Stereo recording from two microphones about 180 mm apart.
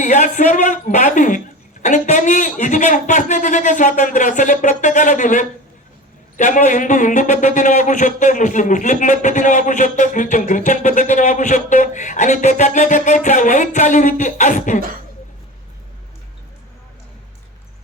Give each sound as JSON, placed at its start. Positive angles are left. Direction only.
{"t": 0.0, "sound": "a man's voice", "side_deg": 45}